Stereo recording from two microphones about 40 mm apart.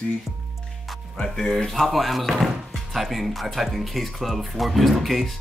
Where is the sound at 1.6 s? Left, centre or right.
Centre.